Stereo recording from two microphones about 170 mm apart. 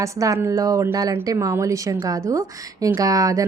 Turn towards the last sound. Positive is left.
turn(degrees=-20)  # may be behind; listen again after turning